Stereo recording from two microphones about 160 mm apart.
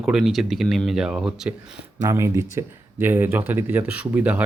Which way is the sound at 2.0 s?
20° right (ahead or behind).